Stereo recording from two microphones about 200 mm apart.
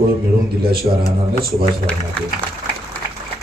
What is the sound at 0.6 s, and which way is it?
Speech, 50° right (ahead or behind).